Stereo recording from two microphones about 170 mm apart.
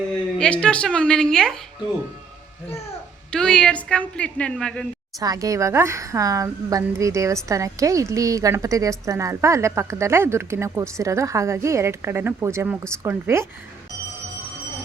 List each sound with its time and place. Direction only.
0.3 s a woman's voice: 5° left (ahead or behind)
3.3 s a woman's voice: 5° left (ahead or behind)
5.2 s a woman's voice: 20° right (ahead or behind)